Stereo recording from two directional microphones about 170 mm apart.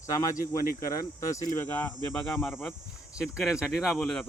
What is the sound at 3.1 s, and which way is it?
Speech, 5° right (ahead or behind).